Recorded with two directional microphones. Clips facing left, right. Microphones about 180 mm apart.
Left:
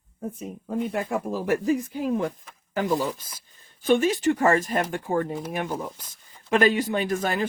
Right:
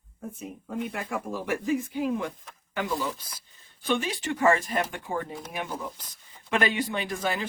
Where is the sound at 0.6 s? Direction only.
30° left (ahead or behind).